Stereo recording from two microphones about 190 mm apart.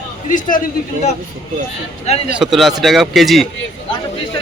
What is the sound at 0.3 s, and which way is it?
Speech, 45° left (ahead or behind).